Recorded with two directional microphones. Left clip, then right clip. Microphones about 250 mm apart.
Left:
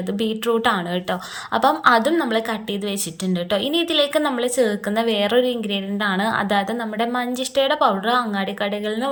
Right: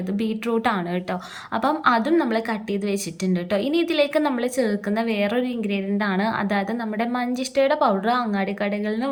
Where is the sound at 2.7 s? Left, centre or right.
Centre.